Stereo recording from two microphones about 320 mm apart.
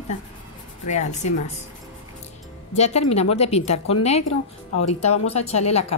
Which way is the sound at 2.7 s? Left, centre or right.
Centre.